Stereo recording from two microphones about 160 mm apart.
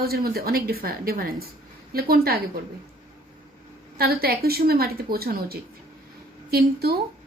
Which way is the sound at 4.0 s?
75° right (ahead or behind).